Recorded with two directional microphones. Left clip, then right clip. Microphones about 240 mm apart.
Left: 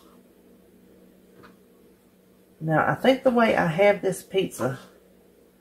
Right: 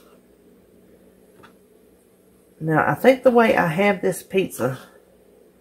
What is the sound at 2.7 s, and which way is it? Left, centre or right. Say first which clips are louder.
Speech: right 4 dB; right.